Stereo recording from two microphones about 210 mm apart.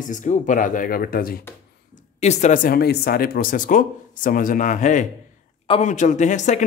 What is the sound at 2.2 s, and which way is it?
Speech, 35° left (ahead or behind).